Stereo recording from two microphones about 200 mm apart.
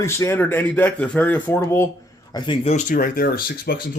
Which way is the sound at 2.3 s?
30° left (ahead or behind).